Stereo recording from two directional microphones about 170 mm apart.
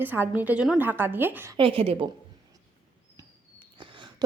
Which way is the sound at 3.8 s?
30° right (ahead or behind).